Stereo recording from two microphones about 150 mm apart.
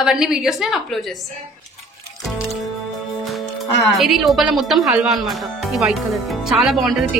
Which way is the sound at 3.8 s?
Centre (ahead or behind).